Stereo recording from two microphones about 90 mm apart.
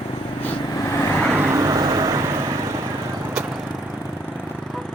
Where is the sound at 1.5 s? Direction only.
35° right (ahead or behind).